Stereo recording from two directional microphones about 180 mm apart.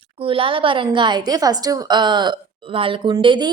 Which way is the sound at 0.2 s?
30° right (ahead or behind).